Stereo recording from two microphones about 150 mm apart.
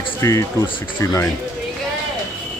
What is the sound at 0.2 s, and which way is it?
Speech, 20° left (ahead or behind).